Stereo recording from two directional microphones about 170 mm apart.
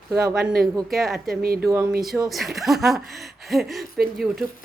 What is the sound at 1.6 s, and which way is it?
Speech, 15° right (ahead or behind).